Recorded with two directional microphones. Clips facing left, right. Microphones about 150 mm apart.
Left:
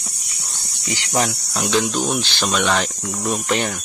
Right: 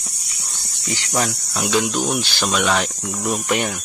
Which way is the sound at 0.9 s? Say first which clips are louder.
Left 1 dB; 20° left (ahead or behind).